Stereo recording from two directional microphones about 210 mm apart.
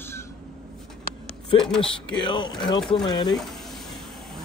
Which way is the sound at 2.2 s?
20° left (ahead or behind).